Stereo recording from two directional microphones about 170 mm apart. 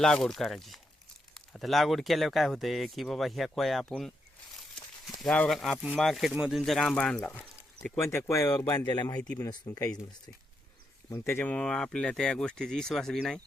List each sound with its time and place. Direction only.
0.0 s speech: 5° left (ahead or behind); by 9.1 s 20° left (ahead or behind)
9.1 s speech: 5° left (ahead or behind)
9.4 s speech: 20° left (ahead or behind)
11.1 s speech: 15° left (ahead or behind)